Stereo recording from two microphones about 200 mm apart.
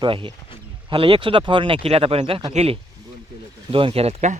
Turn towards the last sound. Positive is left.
turn(degrees=-30)  # may be behind; listen again after turning